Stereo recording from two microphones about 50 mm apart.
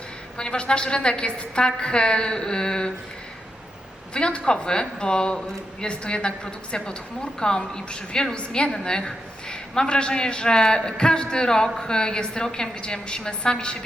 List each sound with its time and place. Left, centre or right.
0.3 s a woman's voice: centre
4.1 s a woman's voice: centre